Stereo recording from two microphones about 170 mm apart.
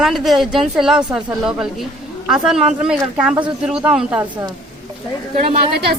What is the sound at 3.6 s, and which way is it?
Speech, 5° right (ahead or behind).